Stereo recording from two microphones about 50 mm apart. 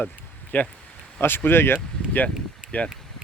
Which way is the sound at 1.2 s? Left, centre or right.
Left.